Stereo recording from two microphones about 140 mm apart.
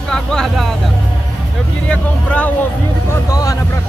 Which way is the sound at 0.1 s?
5° left (ahead or behind).